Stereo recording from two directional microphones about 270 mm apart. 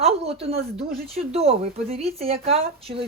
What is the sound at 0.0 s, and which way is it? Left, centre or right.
A woman's voice, right.